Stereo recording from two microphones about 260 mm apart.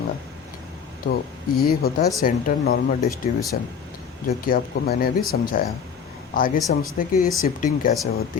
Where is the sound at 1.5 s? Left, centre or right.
Left.